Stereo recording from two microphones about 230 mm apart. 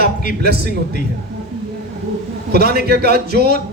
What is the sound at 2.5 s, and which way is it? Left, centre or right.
A man's voice, right.